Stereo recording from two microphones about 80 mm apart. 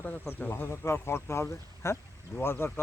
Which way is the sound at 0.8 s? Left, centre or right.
Left.